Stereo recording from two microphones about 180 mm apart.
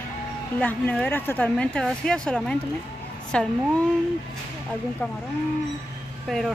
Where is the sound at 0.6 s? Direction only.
10° left (ahead or behind).